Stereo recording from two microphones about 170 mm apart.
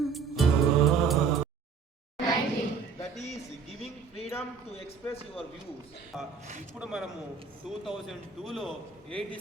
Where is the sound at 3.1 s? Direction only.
40° left (ahead or behind).